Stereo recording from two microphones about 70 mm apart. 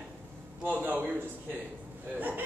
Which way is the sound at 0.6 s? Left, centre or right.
Right.